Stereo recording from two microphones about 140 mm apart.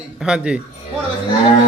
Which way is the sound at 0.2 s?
5° right (ahead or behind).